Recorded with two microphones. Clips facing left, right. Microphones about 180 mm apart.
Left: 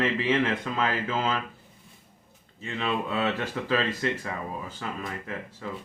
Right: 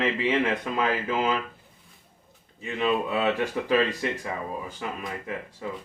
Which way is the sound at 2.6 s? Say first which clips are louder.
Right 4 dB; 15° right (ahead or behind).